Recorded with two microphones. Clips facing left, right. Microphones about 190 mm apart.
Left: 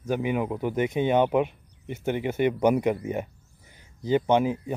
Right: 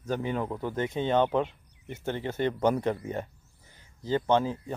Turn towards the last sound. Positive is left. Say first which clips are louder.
# left 3 dB
turn(degrees=15)  # may be behind; listen again after turning